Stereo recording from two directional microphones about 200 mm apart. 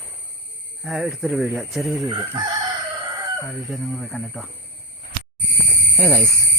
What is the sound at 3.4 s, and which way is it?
Speech, centre (ahead or behind).